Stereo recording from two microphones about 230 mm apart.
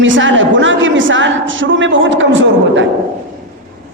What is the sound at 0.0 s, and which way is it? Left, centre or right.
A woman's voice, right.